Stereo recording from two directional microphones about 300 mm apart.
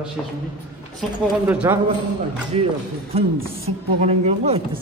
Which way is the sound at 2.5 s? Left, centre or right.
Centre.